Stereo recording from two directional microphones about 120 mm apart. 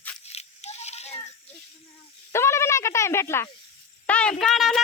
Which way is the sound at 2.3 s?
20° left (ahead or behind).